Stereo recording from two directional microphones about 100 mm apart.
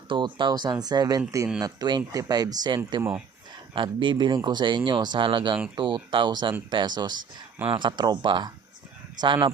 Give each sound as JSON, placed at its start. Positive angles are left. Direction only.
{"t": 0.1, "sound": "speech", "side_deg": -50}